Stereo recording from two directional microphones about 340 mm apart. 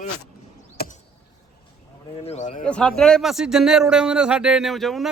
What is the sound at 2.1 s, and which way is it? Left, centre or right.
Speech, centre.